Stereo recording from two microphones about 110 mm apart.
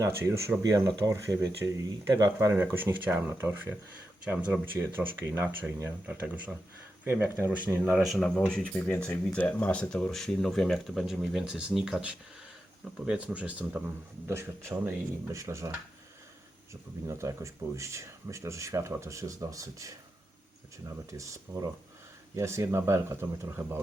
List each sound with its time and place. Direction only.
0.0 s speech: 25° right (ahead or behind)
2.5 s speech: 20° right (ahead or behind)
7.9 s speech: centre (ahead or behind)
14.3 s speech: 25° right (ahead or behind)
17.1 s speech: 25° right (ahead or behind)
21.1 s speech: 25° right (ahead or behind)